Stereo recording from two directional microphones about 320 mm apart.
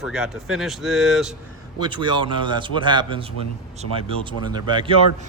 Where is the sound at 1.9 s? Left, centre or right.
Centre.